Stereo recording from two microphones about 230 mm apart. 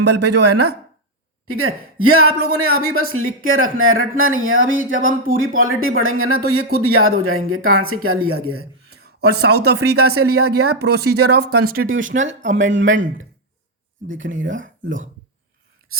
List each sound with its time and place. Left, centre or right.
0.0 s speech: right
1.5 s speech: right
4.9 s speech: right
5.3 s a woman's voice: right
9.3 s speech: right
11.6 s speech: right
12.1 s speech: right
12.5 s speech: right
14.2 s speech: right